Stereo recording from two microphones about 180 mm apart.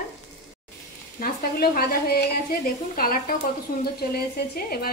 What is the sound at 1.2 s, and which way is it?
Speech, 55° left (ahead or behind).